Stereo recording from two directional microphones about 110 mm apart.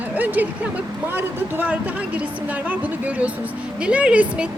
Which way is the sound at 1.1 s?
15° right (ahead or behind).